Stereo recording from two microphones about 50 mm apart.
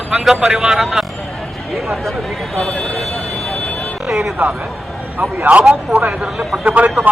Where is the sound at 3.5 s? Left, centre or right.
Left.